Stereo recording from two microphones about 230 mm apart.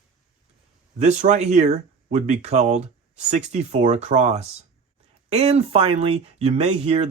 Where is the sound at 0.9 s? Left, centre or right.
Right.